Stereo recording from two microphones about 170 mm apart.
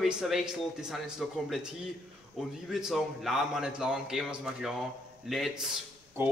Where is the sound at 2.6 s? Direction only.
Centre (ahead or behind).